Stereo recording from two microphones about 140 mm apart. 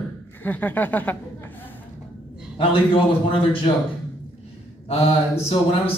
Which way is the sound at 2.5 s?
40° left (ahead or behind).